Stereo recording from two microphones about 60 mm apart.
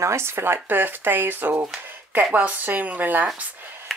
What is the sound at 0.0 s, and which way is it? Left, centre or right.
Speech, right.